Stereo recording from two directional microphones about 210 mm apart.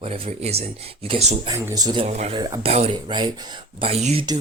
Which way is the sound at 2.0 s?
30° right (ahead or behind).